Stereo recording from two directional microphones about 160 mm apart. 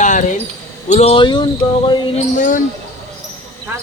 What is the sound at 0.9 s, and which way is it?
Speech, 40° left (ahead or behind).